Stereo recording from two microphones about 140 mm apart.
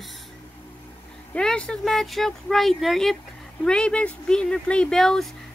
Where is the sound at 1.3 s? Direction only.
5° left (ahead or behind).